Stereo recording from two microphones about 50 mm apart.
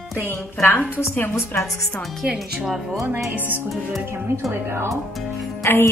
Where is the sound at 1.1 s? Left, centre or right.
Left.